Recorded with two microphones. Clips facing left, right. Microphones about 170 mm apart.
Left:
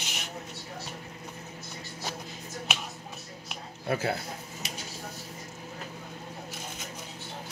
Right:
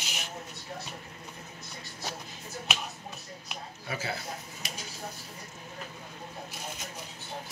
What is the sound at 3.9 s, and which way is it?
Speech, 55° left (ahead or behind).